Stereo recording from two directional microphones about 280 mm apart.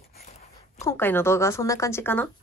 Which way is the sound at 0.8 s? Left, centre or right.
Centre.